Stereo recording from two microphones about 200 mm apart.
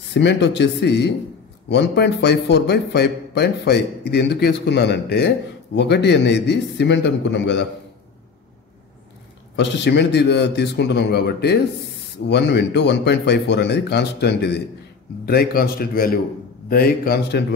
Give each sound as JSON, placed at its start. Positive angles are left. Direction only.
{"t": 0.1, "sound": "a man's voice", "side_deg": 60}
{"t": 9.6, "sound": "a man's voice", "side_deg": 60}